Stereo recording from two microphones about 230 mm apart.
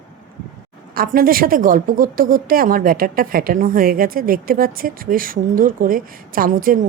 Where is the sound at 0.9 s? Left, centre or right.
Right.